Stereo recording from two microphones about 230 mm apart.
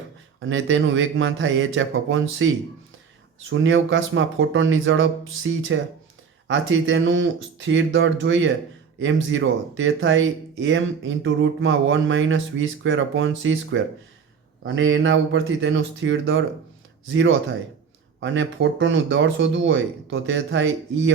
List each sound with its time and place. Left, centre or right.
0.3 s speech: right
3.5 s speech: right